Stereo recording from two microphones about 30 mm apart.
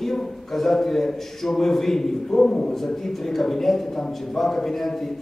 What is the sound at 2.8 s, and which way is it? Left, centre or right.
A man's voice, centre.